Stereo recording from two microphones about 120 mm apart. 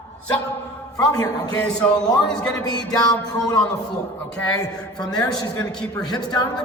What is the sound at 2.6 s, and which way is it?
Music, 35° left (ahead or behind).